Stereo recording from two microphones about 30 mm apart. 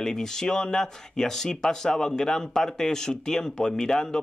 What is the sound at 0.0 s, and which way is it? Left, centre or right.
A man's voice, centre.